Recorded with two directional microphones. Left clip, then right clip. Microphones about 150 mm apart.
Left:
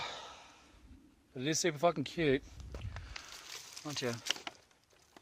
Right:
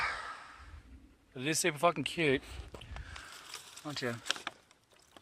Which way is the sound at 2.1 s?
Centre (ahead or behind).